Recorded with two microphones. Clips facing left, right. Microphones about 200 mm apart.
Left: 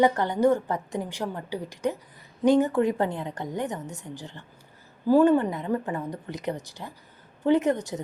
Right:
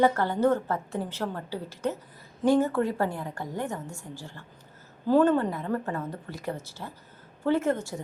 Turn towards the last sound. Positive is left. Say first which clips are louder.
# left 3 dB
turn(degrees=20)  # may be behind; listen again after turning